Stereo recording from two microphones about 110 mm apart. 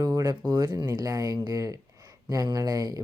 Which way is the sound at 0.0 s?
30° right (ahead or behind).